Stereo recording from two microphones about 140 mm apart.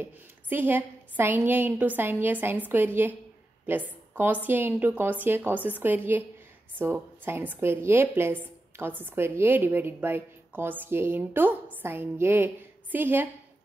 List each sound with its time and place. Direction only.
0.0 s a woman's voice: 15° right (ahead or behind)